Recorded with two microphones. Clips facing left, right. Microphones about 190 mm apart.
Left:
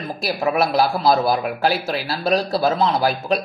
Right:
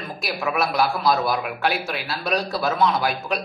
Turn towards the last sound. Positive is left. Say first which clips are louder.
# left 4 dB
turn(degrees=30)  # may be behind; listen again after turning